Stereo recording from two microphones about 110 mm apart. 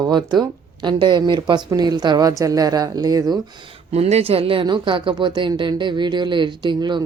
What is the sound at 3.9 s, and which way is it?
Speech, 65° right (ahead or behind).